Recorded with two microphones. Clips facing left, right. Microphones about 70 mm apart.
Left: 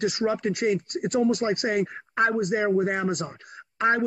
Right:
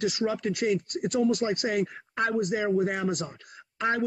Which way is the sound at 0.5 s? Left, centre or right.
Left.